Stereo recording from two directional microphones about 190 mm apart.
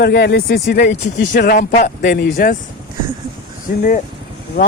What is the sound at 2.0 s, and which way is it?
Speech, 55° left (ahead or behind).